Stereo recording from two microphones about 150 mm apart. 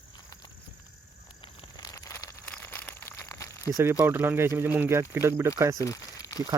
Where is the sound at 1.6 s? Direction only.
25° left (ahead or behind).